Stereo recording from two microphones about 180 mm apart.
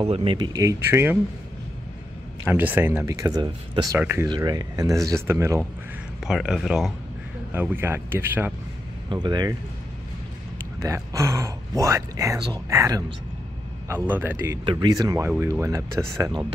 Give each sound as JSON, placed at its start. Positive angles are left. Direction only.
{"t": 0.0, "sound": "speech", "side_deg": -30}
{"t": 2.4, "sound": "speech", "side_deg": -10}
{"t": 6.2, "sound": "speech", "side_deg": 0}
{"t": 9.1, "sound": "speech", "side_deg": -25}
{"t": 10.8, "sound": "speech", "side_deg": -15}
{"t": 14.6, "sound": "speech", "side_deg": -25}